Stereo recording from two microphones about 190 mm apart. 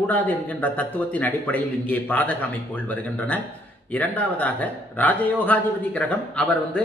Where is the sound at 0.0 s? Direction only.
10° left (ahead or behind).